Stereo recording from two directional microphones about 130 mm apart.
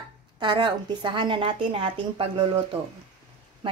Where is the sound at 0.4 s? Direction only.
35° right (ahead or behind).